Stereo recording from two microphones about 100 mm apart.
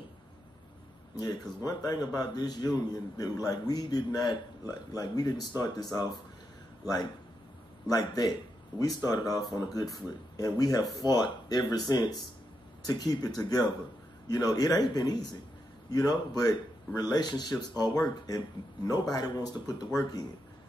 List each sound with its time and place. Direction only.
1.1 s a man's voice: 40° left (ahead or behind)
7.8 s a man's voice: 40° left (ahead or behind)